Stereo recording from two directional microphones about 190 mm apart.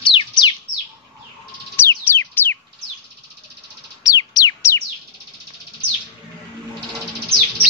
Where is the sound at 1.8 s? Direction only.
10° left (ahead or behind).